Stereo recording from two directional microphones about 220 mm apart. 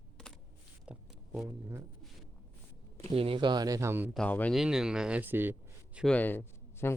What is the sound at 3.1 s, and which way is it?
Speech, 25° right (ahead or behind).